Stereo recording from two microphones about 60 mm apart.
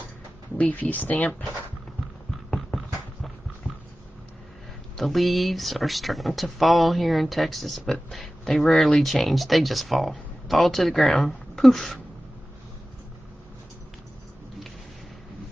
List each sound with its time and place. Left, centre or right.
0.6 s speech: left
2.5 s a sound: centre
4.9 s speech: centre